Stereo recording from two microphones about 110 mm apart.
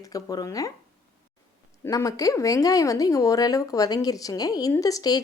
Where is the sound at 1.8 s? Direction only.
30° left (ahead or behind).